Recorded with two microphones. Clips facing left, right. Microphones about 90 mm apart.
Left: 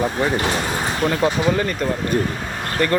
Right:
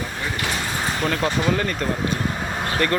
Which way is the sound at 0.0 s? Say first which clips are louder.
Left 9 dB; 45° left (ahead or behind).